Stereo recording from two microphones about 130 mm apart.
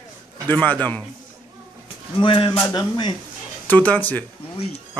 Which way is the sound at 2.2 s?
40° left (ahead or behind).